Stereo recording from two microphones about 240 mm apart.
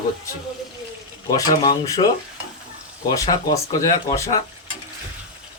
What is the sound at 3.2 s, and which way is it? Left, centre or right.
Speech, centre.